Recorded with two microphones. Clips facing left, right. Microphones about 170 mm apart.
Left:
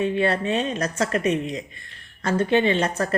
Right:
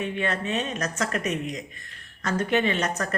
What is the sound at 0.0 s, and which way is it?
Speech, 35° left (ahead or behind).